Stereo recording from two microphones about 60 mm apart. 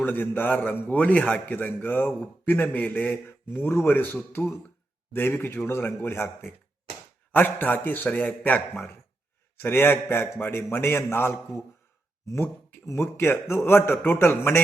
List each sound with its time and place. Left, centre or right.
0.0 s a man's voice: left
7.3 s a man's voice: left
12.4 s a man's voice: left